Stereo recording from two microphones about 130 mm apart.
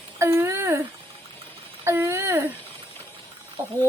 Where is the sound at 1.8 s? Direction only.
20° right (ahead or behind).